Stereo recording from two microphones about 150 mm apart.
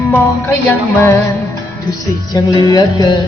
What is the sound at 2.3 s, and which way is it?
Music, 25° left (ahead or behind).